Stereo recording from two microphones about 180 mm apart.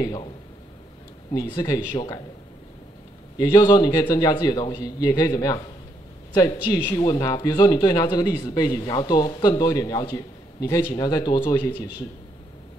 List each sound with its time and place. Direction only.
0.0 s speech: 25° left (ahead or behind)
1.3 s speech: 20° left (ahead or behind)
3.3 s speech: 20° left (ahead or behind)
7.0 s speech: 20° left (ahead or behind)